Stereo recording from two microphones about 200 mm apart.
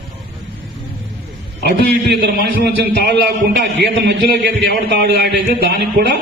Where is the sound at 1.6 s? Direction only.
55° right (ahead or behind).